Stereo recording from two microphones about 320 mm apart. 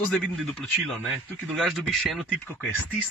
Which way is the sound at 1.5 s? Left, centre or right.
Centre.